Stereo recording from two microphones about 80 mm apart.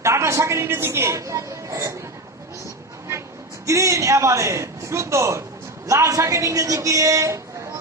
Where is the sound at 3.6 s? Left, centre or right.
Right.